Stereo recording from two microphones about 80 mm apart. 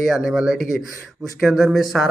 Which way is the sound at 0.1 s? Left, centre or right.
Centre.